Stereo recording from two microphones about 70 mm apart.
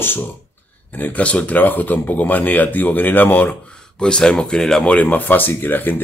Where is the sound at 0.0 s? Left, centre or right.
Left.